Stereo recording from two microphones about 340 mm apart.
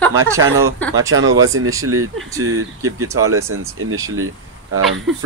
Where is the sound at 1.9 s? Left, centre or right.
Right.